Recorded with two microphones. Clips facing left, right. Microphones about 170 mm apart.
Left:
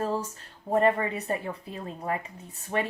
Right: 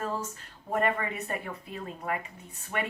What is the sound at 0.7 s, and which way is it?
Speech, 30° left (ahead or behind).